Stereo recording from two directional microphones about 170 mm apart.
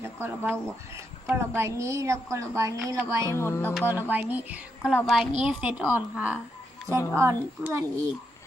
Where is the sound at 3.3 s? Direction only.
15° left (ahead or behind).